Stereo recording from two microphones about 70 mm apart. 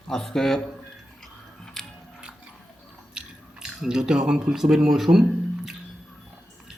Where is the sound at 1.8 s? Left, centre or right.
Centre.